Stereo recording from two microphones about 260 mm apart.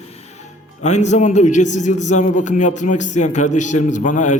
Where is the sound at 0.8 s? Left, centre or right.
Left.